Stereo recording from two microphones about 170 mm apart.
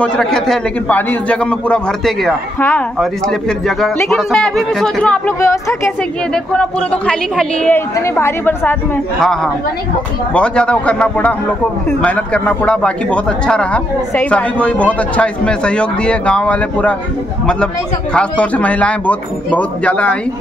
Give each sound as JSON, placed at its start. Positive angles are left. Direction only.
{"t": 0.0, "sound": "a man's voice", "side_deg": 5}
{"t": 5.4, "sound": "speech", "side_deg": 15}
{"t": 6.3, "sound": "a man's voice", "side_deg": 5}
{"t": 18.1, "sound": "speech", "side_deg": 5}